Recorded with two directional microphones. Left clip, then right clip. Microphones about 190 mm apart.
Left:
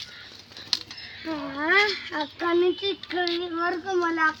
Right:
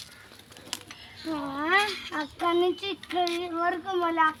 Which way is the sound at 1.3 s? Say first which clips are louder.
Left 2 dB; 40° right (ahead or behind).